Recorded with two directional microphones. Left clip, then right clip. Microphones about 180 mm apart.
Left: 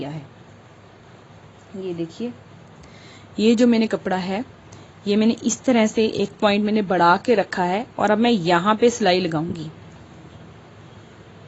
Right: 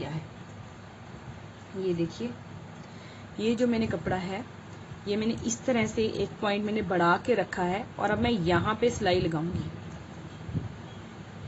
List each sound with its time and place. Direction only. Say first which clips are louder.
3.3 s a woman's voice: left 10 dB; 65° left (ahead or behind)